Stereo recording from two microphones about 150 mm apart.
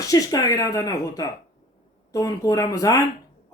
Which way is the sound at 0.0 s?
20° left (ahead or behind).